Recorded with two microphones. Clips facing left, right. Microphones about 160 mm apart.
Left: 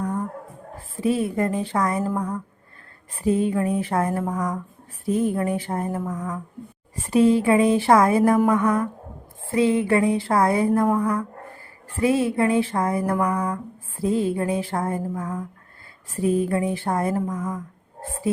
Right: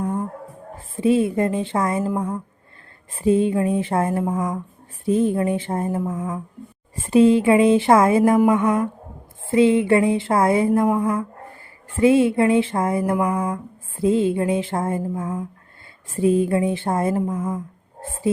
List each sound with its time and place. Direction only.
1.0 s speech: 25° right (ahead or behind)